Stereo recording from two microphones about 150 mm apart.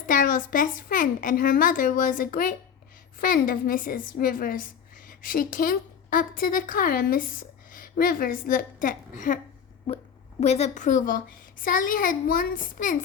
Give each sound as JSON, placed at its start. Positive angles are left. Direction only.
{"t": 0.1, "sound": "a woman's voice", "side_deg": 65}
{"t": 10.4, "sound": "speech", "side_deg": 45}